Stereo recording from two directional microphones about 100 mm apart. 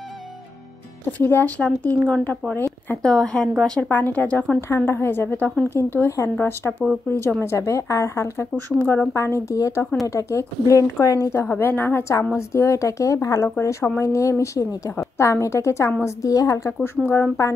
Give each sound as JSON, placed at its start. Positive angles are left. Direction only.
{"t": 1.1, "sound": "speech", "side_deg": 20}
{"t": 2.5, "sound": "speech", "side_deg": 20}
{"t": 3.0, "sound": "a woman's voice", "side_deg": 5}
{"t": 8.7, "sound": "speech", "side_deg": 15}
{"t": 9.1, "sound": "a woman's voice", "side_deg": 30}